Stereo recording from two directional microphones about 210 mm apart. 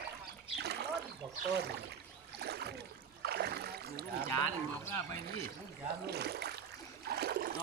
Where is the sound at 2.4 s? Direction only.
50° right (ahead or behind).